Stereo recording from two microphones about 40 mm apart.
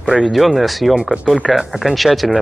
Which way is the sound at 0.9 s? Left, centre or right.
Centre.